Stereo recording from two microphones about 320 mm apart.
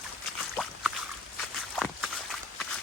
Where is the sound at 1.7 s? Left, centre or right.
Centre.